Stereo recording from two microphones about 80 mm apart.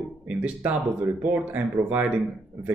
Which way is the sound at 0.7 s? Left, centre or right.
Right.